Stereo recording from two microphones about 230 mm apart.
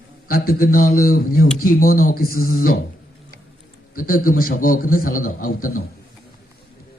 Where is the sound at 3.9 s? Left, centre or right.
Left.